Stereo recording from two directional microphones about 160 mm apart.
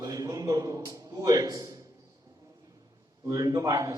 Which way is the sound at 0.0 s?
25° right (ahead or behind).